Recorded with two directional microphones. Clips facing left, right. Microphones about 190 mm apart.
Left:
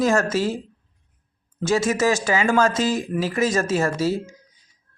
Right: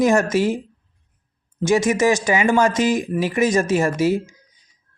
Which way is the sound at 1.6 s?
15° right (ahead or behind).